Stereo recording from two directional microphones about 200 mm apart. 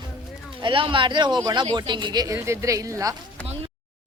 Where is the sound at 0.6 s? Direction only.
25° right (ahead or behind).